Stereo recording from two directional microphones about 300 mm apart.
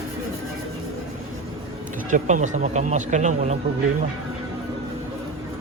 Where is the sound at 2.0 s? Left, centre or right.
Right.